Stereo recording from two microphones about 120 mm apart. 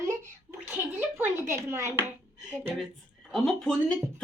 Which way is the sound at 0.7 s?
15° right (ahead or behind).